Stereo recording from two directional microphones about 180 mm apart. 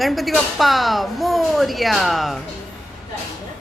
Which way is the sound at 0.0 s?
Centre (ahead or behind).